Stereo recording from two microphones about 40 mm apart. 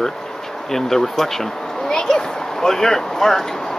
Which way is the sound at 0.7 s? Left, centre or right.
Centre.